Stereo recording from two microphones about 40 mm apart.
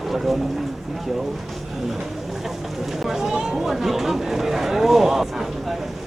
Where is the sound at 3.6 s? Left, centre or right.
Centre.